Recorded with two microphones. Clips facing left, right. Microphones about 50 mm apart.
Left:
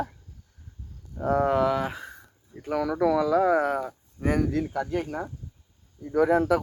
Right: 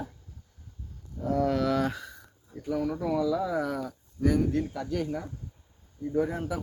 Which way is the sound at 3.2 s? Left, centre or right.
Left.